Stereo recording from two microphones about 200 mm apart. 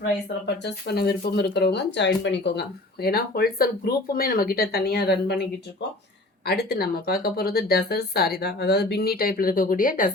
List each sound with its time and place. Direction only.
0.0 s speech: 60° left (ahead or behind); by 10.1 s 40° left (ahead or behind)